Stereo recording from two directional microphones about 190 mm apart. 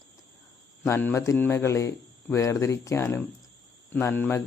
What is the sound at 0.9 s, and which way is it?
Speech, 10° left (ahead or behind).